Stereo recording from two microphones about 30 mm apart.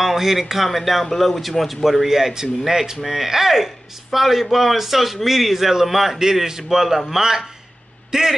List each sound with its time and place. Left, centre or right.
0.0 s speech: centre
2.0 s speech: centre